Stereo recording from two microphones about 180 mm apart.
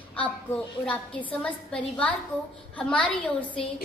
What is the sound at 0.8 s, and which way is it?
A woman's voice, 5° left (ahead or behind).